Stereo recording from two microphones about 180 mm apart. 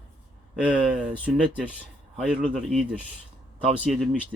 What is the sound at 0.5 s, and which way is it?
A man's voice, 5° right (ahead or behind).